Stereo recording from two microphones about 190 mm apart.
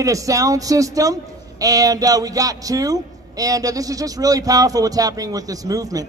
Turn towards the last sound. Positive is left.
turn(degrees=-20)  # may be behind; listen again after turning